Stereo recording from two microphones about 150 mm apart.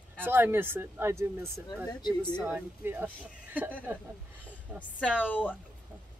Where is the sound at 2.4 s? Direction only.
15° right (ahead or behind).